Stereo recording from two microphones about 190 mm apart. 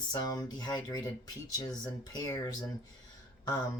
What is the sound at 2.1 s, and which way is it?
Speech, 20° left (ahead or behind).